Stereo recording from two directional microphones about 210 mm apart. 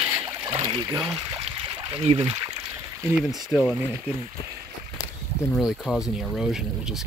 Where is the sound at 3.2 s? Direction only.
Centre (ahead or behind).